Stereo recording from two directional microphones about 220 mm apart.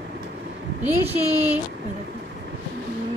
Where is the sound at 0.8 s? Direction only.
10° right (ahead or behind).